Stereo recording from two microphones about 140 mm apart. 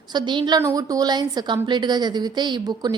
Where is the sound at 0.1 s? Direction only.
35° right (ahead or behind).